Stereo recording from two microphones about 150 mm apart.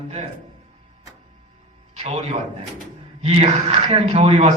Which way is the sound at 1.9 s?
45° right (ahead or behind).